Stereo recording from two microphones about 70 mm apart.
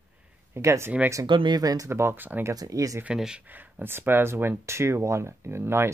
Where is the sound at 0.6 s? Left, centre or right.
Right.